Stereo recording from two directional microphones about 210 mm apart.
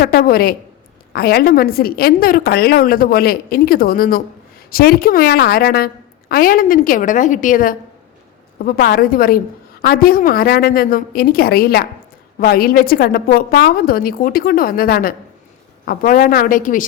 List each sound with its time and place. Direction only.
0.0 s a woman's voice: 45° left (ahead or behind)